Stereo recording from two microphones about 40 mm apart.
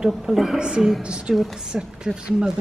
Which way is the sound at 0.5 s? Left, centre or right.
Right.